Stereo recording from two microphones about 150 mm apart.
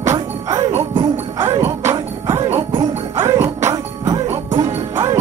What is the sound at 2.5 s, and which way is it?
Music, 35° right (ahead or behind).